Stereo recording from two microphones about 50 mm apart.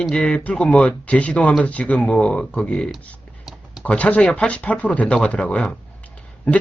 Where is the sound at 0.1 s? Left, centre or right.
Centre.